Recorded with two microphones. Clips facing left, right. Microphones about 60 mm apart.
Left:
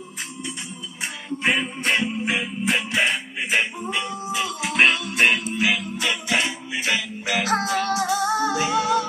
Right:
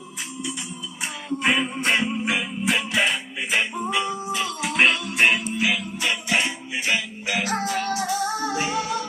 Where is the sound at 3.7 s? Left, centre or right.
Centre.